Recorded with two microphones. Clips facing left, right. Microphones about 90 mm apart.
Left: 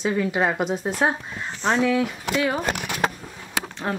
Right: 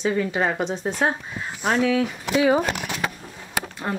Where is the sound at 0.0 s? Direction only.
5° left (ahead or behind).